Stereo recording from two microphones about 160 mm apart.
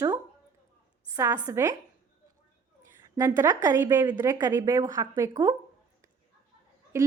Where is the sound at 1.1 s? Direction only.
10° right (ahead or behind).